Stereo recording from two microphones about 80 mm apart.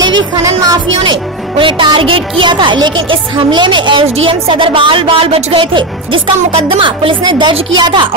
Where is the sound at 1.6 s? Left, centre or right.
Right.